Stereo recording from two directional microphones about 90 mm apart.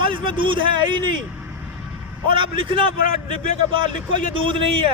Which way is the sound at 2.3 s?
70° right (ahead or behind).